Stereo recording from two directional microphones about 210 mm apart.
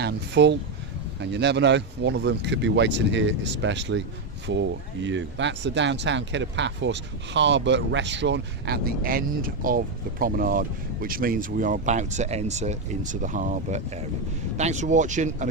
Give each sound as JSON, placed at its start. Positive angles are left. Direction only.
{"t": 0.0, "sound": "speech", "side_deg": -55}